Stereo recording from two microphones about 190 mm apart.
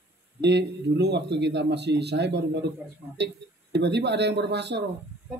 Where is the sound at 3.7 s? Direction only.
65° right (ahead or behind).